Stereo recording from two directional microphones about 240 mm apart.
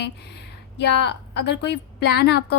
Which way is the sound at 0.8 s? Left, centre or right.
Left.